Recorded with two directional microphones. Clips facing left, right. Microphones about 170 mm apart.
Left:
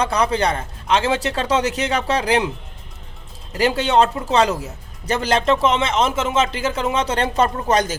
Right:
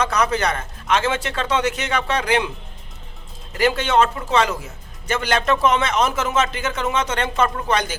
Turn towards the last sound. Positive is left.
turn(degrees=40)  # may be behind; listen again after turning